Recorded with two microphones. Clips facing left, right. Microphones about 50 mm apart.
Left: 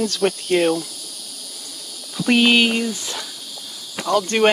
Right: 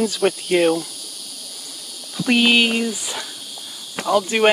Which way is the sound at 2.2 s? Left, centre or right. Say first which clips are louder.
Left 1 dB; centre.